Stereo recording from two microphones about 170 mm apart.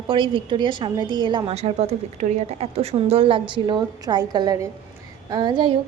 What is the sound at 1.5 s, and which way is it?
A woman's voice, 40° right (ahead or behind).